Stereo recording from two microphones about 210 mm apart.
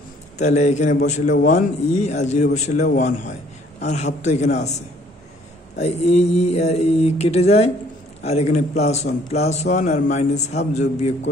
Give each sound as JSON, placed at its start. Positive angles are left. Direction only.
{"t": 0.4, "sound": "a man's voice", "side_deg": 35}
{"t": 5.8, "sound": "a man's voice", "side_deg": 30}